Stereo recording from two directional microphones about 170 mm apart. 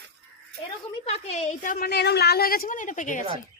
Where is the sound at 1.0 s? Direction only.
35° left (ahead or behind).